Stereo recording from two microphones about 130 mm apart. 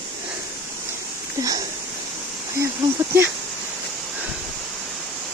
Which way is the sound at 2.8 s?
35° right (ahead or behind).